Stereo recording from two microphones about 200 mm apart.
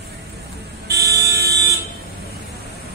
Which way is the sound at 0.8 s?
55° right (ahead or behind).